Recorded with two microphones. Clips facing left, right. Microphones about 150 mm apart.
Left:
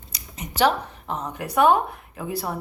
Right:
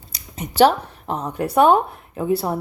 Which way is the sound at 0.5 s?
30° right (ahead or behind).